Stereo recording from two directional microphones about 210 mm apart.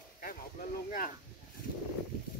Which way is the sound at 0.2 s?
40° left (ahead or behind).